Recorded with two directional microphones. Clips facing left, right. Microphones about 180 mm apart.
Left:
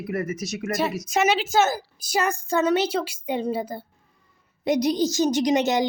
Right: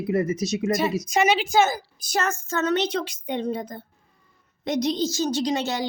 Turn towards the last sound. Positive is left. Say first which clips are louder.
# left 4 dB
turn(degrees=20)  # may be behind; listen again after turning